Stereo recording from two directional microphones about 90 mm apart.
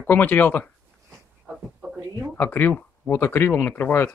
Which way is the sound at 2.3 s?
20° left (ahead or behind).